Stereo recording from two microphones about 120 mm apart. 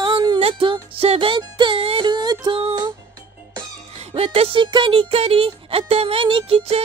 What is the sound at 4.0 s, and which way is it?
Music, 55° right (ahead or behind).